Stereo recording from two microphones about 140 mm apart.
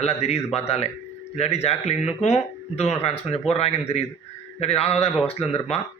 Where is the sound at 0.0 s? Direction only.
50° left (ahead or behind).